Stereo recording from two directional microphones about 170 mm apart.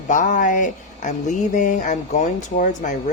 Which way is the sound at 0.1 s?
45° left (ahead or behind).